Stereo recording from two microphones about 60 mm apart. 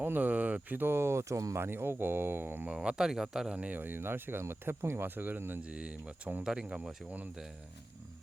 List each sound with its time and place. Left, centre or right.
0.0 s speech: right
1.5 s speech: right
2.6 s speech: centre
3.5 s speech: right
3.8 s speech: right
5.6 s speech: right
6.4 s speech: centre